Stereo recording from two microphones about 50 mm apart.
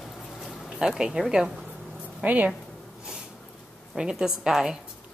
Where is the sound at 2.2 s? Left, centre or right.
Right.